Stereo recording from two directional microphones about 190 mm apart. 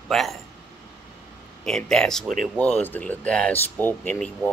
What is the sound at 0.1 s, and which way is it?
Speech, centre (ahead or behind).